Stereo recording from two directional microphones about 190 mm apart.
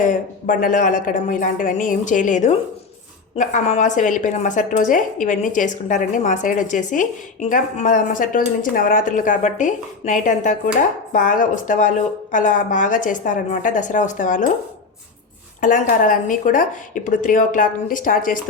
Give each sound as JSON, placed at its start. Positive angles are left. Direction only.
{"t": 0.0, "sound": "a woman's voice", "side_deg": 45}
{"t": 15.6, "sound": "speech", "side_deg": 45}